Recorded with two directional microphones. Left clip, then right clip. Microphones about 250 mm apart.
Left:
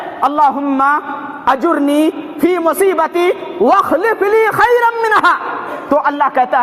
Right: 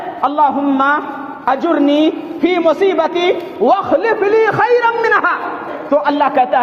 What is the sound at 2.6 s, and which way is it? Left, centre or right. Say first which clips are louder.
A man's voice: right 1 dB; left.